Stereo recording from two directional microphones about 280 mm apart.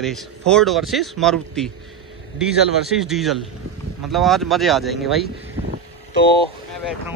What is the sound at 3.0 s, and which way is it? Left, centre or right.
Speech, centre.